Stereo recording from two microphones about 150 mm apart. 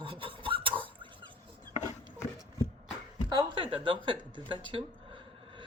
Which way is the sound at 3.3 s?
30° right (ahead or behind).